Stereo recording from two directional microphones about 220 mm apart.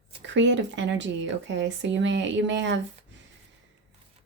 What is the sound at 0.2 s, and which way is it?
Speech, 55° right (ahead or behind).